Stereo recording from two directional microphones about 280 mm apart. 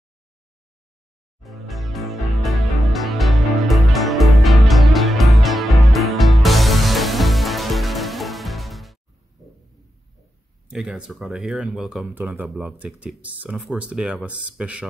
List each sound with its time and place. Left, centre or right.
1.4 s music: centre
10.7 s speech: centre